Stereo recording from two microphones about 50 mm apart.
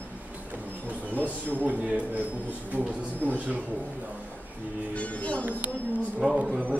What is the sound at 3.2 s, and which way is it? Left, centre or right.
Speech, right.